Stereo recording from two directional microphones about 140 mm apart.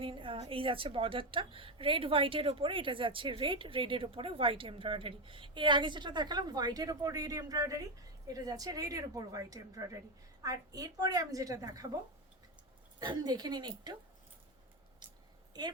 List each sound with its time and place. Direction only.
0.0 s a woman's voice: 40° right (ahead or behind)
13.0 s a woman's voice: 30° right (ahead or behind)